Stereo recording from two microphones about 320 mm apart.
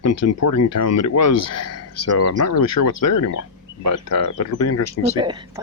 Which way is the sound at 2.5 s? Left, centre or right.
Left.